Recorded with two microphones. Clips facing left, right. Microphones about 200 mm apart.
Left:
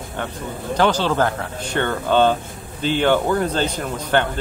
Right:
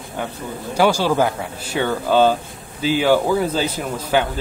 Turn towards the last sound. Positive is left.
turn(degrees=-5)  # may be behind; listen again after turning